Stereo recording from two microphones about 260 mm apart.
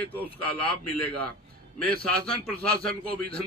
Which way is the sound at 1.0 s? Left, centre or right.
Centre.